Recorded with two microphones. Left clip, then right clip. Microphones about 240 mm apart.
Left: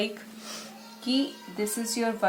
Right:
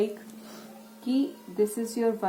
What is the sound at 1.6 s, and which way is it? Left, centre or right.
Speech, left.